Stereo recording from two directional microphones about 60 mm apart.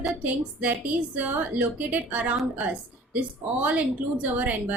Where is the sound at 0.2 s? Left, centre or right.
Right.